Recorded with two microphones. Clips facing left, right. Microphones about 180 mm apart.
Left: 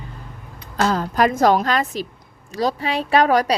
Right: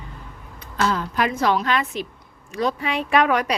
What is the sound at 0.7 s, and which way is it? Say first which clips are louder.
A woman's voice: left 3 dB; 40° left (ahead or behind).